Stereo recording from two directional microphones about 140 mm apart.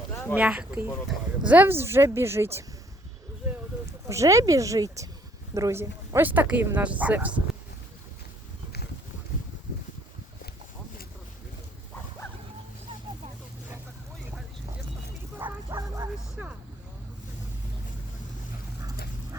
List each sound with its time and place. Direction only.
0.3 s speech: 5° right (ahead or behind)
4.0 s speech: 20° right (ahead or behind)
15.4 s bow-wow: 15° right (ahead or behind)
16.3 s vehicle: 5° right (ahead or behind)